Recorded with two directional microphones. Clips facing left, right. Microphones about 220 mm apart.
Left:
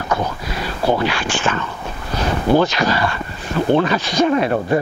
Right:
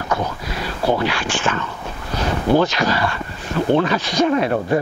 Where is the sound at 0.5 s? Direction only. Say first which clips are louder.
Left 1 dB; 15° left (ahead or behind).